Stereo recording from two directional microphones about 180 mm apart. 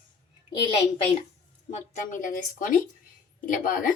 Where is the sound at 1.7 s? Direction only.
45° left (ahead or behind).